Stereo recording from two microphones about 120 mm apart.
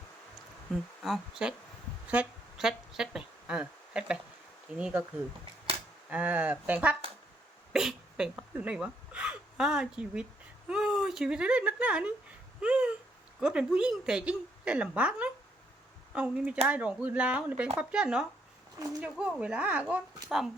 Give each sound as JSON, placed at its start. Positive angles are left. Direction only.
{"t": 1.0, "sound": "a woman's voice", "side_deg": 0}
{"t": 6.1, "sound": "a woman's voice", "side_deg": -10}
{"t": 7.7, "sound": "a sound", "side_deg": -5}
{"t": 10.7, "sound": "speech", "side_deg": -5}
{"t": 12.6, "sound": "a sound", "side_deg": -10}
{"t": 13.4, "sound": "a woman's voice", "side_deg": -5}